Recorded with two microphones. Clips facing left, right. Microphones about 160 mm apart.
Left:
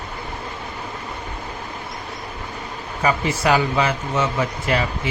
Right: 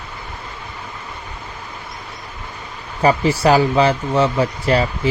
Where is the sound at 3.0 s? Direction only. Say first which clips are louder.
Right 5 dB; 35° right (ahead or behind).